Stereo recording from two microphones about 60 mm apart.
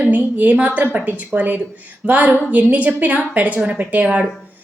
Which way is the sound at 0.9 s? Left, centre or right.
Right.